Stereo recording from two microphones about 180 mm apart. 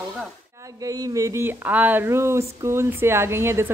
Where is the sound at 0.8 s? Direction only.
20° right (ahead or behind).